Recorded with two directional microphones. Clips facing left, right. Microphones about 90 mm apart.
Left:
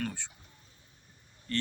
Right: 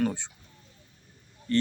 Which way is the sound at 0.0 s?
20° right (ahead or behind).